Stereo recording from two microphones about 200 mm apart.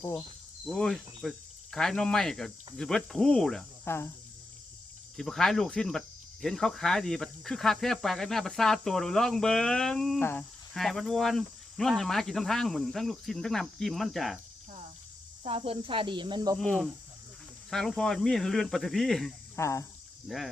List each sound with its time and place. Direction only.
0.0 s cricket: 15° left (ahead or behind)
0.7 s speech: centre (ahead or behind)
5.1 s speech: centre (ahead or behind)
15.4 s speech: 30° right (ahead or behind)
16.6 s speech: centre (ahead or behind)
19.5 s speech: 15° left (ahead or behind)
20.2 s speech: centre (ahead or behind)